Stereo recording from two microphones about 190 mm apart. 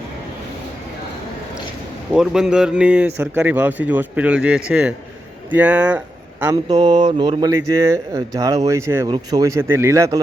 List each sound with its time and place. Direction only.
2.1 s speech: 5° right (ahead or behind)
6.4 s speech: 20° right (ahead or behind)